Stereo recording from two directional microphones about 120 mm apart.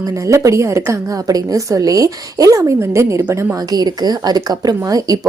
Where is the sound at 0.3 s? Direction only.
25° right (ahead or behind).